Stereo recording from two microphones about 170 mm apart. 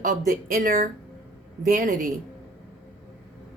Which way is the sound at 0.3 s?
55° right (ahead or behind).